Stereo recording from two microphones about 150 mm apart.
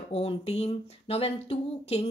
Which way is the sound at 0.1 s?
40° left (ahead or behind).